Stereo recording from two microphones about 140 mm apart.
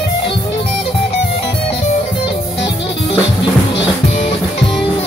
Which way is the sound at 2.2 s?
35° left (ahead or behind).